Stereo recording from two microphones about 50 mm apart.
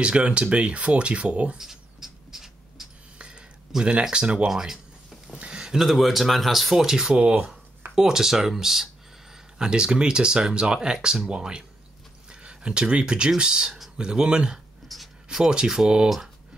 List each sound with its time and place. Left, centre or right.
0.0 s speech: right
1.6 s a sound: centre
3.2 s a sound: centre
4.0 s speech: centre
4.5 s a sound: centre
5.8 s speech: centre
7.2 s speech: right
7.9 s speech: centre
14.9 s writing: centre
15.2 s speech: centre